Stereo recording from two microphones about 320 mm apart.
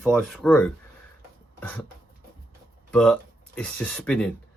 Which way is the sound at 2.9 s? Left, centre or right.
Centre.